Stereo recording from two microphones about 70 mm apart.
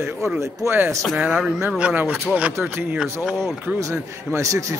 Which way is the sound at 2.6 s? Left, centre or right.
Right.